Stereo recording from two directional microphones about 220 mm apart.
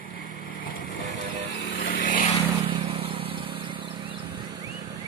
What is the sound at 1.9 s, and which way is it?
Vehicle, 40° left (ahead or behind).